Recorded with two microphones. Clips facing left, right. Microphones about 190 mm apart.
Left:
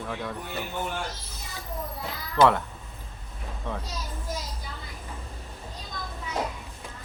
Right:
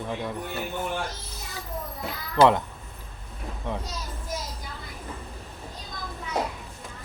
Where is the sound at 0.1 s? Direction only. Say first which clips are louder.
Right 2 dB; 15° right (ahead or behind).